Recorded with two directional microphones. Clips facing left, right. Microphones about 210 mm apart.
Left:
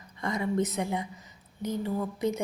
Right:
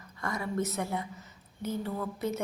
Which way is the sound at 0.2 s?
20° left (ahead or behind).